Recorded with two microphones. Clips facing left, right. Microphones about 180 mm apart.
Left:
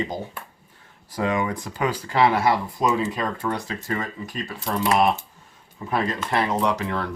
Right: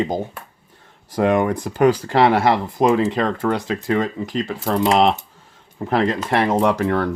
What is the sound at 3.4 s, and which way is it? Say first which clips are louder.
Speech: right 7 dB; 80° right.